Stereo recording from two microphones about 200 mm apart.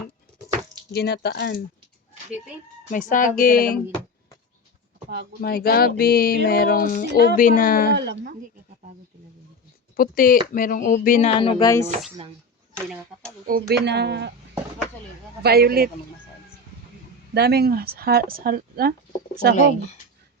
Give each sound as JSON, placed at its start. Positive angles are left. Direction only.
{"t": 0.9, "sound": "speech", "side_deg": 55}
{"t": 2.9, "sound": "speech", "side_deg": 40}
{"t": 5.4, "sound": "speech", "side_deg": 50}
{"t": 7.9, "sound": "speech", "side_deg": -60}
{"t": 8.2, "sound": "speech", "side_deg": -40}
{"t": 9.9, "sound": "speech", "side_deg": 45}
{"t": 11.3, "sound": "speech", "side_deg": 25}
{"t": 12.7, "sound": "speech", "side_deg": 5}
{"t": 13.5, "sound": "speech", "side_deg": -55}
{"t": 15.4, "sound": "speech", "side_deg": -50}
{"t": 17.3, "sound": "speech", "side_deg": -55}
{"t": 19.5, "sound": "speech", "side_deg": 35}